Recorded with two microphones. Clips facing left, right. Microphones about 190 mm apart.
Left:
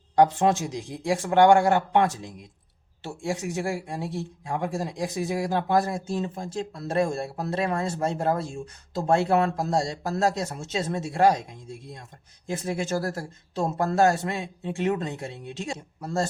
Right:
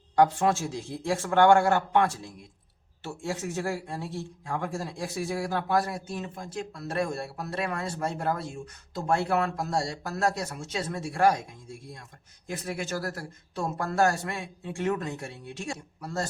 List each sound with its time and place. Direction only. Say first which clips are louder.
0.2 s speech: left 3 dB; 20° left (ahead or behind)